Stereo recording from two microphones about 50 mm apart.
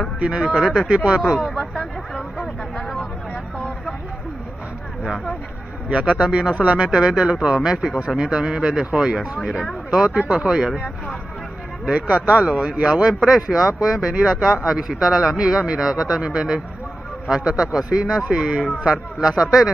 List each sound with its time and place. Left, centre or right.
0.2 s speech: centre
0.6 s speech: centre
0.8 s speech: centre
1.2 s speech: centre
2.1 s a sound: centre
5.9 s a man's voice: right
6.8 s speech: centre
11.8 s speech: right